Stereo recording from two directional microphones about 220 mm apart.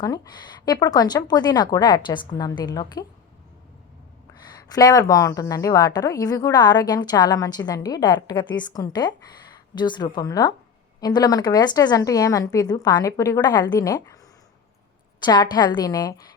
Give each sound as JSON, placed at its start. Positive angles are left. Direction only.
{"t": 0.0, "sound": "speech", "side_deg": 20}
{"t": 4.4, "sound": "a woman's voice", "side_deg": 15}
{"t": 15.2, "sound": "speech", "side_deg": 20}